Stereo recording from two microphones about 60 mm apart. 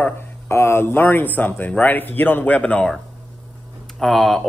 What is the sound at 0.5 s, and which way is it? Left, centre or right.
Speech, left.